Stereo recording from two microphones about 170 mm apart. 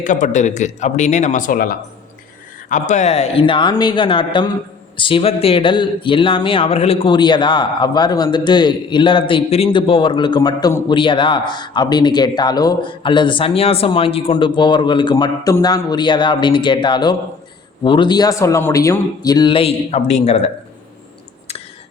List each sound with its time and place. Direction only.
0.0 s a man's voice: 45° left (ahead or behind)